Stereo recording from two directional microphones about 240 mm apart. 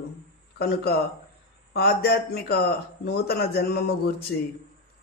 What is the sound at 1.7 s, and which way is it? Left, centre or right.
A man's voice, left.